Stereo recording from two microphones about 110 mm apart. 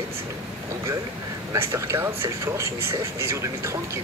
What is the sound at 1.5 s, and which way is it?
Speech, 25° right (ahead or behind).